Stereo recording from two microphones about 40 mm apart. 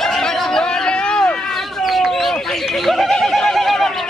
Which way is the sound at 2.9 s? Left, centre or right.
Centre.